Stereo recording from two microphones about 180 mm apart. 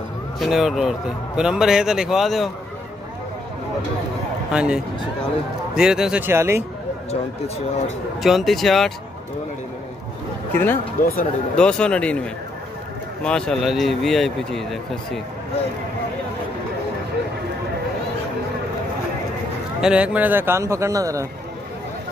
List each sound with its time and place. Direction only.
0.4 s a man's voice: centre (ahead or behind)
4.5 s a man's voice: 5° right (ahead or behind)
7.1 s speech: 35° left (ahead or behind)
8.2 s a man's voice: centre (ahead or behind)
10.5 s speech: 10° left (ahead or behind)
11.0 s speech: 50° left (ahead or behind)
11.5 s a man's voice: 5° left (ahead or behind)
13.2 s a man's voice: 5° left (ahead or behind)
19.8 s a man's voice: 5° right (ahead or behind)